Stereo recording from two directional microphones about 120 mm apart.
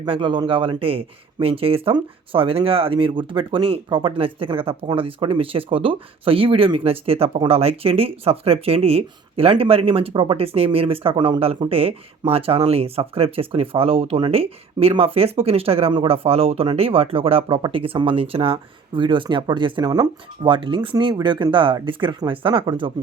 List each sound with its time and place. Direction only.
0.0 s speech: 40° right (ahead or behind)